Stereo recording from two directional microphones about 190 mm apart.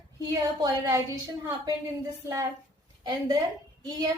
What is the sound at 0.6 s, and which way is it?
A woman's voice, 15° right (ahead or behind).